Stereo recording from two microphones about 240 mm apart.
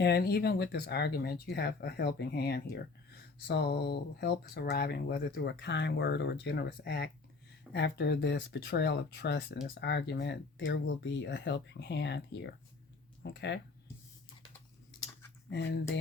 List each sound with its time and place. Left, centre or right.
0.0 s speech: left
15.4 s speech: left